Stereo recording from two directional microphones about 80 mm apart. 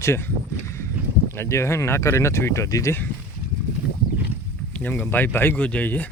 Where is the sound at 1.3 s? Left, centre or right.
Left.